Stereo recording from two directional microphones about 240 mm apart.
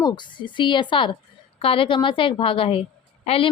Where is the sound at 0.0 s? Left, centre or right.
Centre.